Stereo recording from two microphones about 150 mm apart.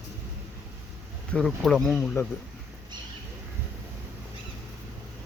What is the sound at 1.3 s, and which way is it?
Speech, 5° left (ahead or behind).